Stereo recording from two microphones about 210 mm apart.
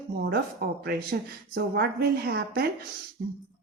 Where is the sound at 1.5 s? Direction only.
50° right (ahead or behind).